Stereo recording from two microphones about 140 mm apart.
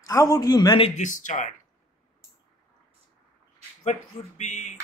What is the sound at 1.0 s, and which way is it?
Speech, 65° left (ahead or behind).